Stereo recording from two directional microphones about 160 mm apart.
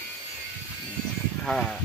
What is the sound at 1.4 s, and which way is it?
Speech, 5° left (ahead or behind).